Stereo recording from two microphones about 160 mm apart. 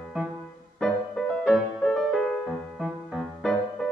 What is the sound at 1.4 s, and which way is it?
Music, centre (ahead or behind).